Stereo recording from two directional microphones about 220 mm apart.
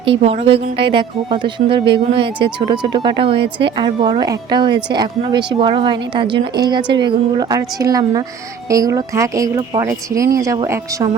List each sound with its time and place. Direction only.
0.0 s a woman's voice: 25° right (ahead or behind)